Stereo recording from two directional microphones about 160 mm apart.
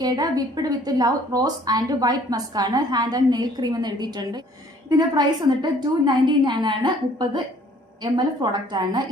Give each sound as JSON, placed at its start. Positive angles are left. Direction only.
{"t": 0.0, "sound": "a woman's voice", "side_deg": -25}